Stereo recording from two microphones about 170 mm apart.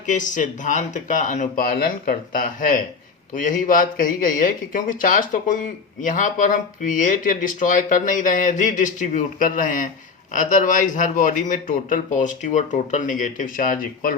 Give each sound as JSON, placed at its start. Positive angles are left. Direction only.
{"t": 0.0, "sound": "speech", "side_deg": 50}